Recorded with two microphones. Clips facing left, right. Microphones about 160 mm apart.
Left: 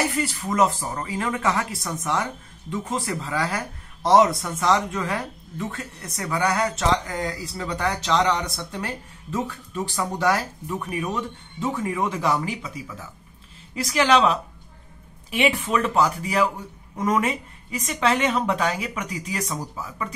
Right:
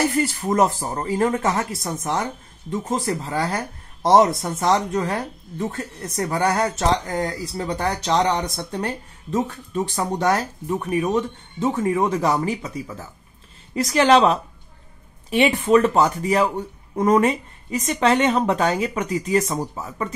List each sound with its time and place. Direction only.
0.1 s speech: 50° right (ahead or behind)
19.6 s speech: 30° right (ahead or behind)